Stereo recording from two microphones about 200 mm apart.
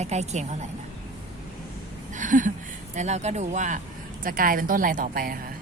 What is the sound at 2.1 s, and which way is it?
A woman's voice, 40° right (ahead or behind).